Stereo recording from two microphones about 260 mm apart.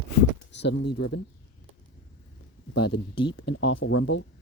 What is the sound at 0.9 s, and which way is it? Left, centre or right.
Speech, left.